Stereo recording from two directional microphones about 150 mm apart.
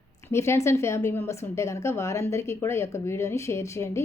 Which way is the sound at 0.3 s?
20° left (ahead or behind).